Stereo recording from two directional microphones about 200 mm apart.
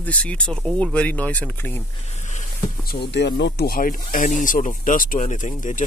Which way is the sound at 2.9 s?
55° left (ahead or behind).